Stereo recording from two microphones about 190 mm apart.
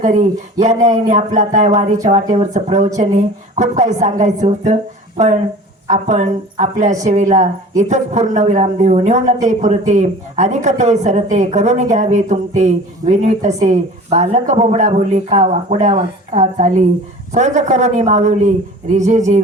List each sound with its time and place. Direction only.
0.0 s a man's voice: 40° right (ahead or behind)